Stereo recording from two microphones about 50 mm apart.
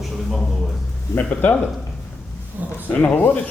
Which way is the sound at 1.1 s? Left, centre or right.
Left.